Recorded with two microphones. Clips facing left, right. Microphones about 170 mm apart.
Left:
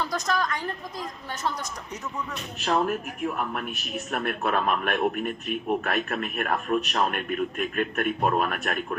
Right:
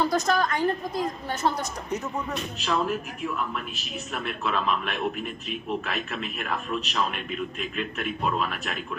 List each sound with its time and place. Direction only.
0.0 s a woman's voice: 30° right (ahead or behind)
2.6 s a man's voice: 50° left (ahead or behind)